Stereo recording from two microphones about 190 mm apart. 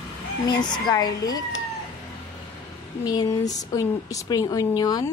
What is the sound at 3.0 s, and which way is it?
Speech, 20° left (ahead or behind).